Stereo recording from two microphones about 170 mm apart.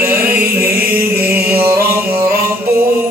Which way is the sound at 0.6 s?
65° right (ahead or behind).